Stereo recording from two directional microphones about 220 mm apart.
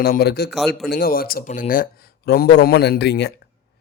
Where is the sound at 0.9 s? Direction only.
45° left (ahead or behind).